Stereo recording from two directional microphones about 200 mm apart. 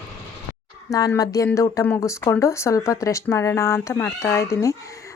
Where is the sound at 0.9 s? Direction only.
20° left (ahead or behind).